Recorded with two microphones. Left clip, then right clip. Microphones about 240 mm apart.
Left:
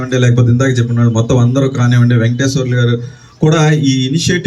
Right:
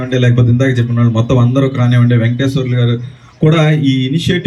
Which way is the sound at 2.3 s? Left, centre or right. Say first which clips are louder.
Left 1 dB; left.